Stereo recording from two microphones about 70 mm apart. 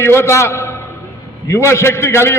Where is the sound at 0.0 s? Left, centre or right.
Left.